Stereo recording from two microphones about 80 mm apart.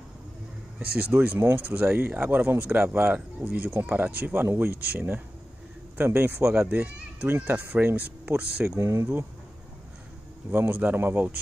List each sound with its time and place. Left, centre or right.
0.7 s speech: centre
3.2 s speech: centre
3.5 s speech: right
8.6 s speech: right
10.5 s speech: right